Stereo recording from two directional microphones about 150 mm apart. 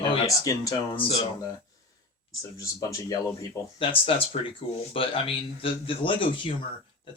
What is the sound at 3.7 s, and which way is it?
Speech, 35° left (ahead or behind).